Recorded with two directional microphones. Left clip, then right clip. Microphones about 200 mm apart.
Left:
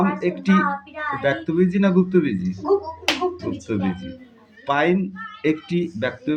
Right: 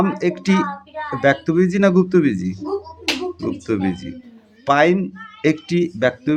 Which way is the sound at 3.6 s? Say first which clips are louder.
Right 5 dB; 45° right (ahead or behind).